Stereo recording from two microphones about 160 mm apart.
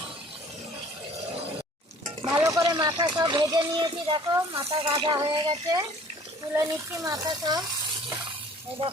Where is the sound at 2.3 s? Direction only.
20° right (ahead or behind).